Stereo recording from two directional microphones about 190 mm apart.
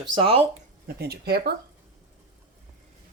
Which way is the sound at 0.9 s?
55° right (ahead or behind).